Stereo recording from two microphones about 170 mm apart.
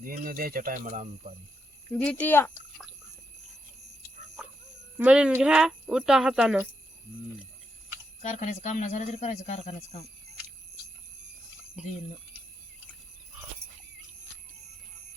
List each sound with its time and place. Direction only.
0.0 s speech: 60° right (ahead or behind)
1.9 s speech: 10° left (ahead or behind)
4.9 s speech: 5° right (ahead or behind)
8.2 s speech: 40° left (ahead or behind)
11.8 s speech: 5° right (ahead or behind)